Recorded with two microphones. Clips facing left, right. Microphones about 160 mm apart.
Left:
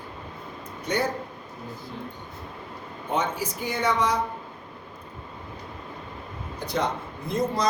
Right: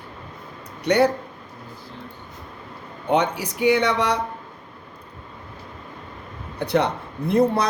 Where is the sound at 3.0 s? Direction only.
70° right (ahead or behind).